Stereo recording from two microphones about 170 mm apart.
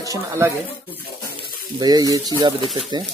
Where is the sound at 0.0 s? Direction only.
20° right (ahead or behind).